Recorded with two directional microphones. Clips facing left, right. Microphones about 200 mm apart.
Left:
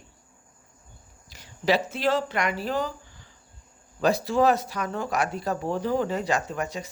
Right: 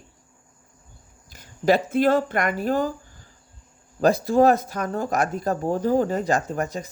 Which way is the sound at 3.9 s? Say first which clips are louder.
Right 4 dB; 50° right (ahead or behind).